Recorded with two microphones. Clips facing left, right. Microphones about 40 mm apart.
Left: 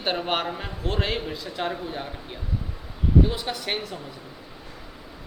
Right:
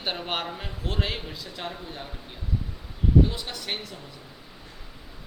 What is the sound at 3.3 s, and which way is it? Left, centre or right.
Speech, centre.